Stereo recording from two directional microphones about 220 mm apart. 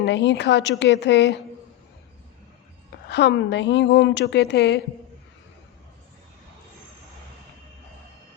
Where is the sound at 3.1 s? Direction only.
50° left (ahead or behind).